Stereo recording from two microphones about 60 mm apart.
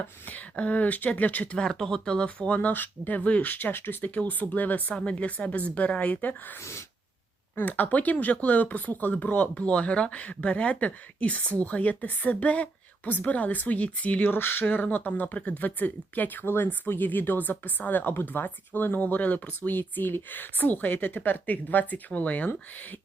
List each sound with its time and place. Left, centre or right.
0.3 s speech: left
1.5 s speech: centre
6.6 s wail: left
7.5 s speech: left
14.3 s speech: left